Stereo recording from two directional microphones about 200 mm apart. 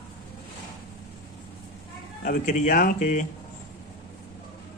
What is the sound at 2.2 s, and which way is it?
Speech, 40° left (ahead or behind).